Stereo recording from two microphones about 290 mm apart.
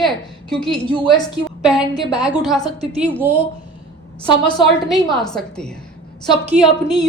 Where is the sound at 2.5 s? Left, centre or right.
Centre.